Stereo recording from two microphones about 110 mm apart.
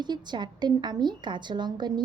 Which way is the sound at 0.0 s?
40° right (ahead or behind).